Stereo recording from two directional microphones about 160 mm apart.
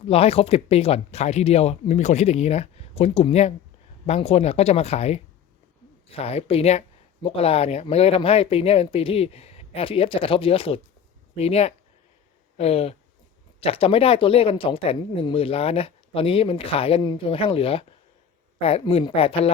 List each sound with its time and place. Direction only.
0.1 s speech: 40° left (ahead or behind)